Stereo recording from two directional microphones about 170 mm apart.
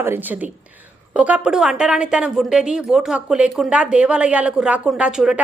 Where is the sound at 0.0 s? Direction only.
10° right (ahead or behind).